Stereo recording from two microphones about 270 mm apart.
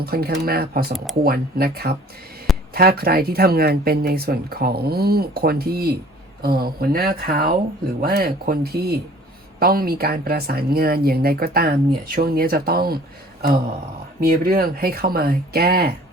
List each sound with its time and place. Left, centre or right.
0.0 s speech: right
14.2 s speech: right